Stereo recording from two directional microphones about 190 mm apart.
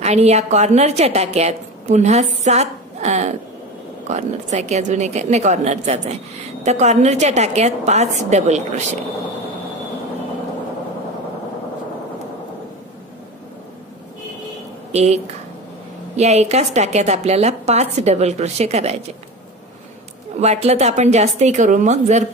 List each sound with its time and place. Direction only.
0.0 s a woman's voice: 35° right (ahead or behind)
14.9 s speech: 35° right (ahead or behind)
16.2 s a woman's voice: 35° right (ahead or behind)
20.3 s a woman's voice: 35° right (ahead or behind)